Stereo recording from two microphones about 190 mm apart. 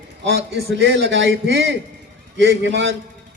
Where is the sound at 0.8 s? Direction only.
75° right (ahead or behind).